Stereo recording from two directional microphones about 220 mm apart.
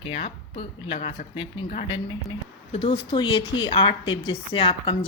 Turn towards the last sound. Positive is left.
turn(degrees=25)  # may be behind; listen again after turning